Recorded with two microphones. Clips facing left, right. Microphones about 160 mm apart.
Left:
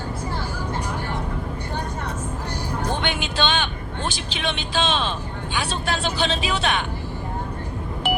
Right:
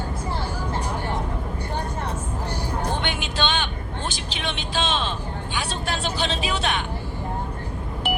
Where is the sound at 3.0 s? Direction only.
90° left.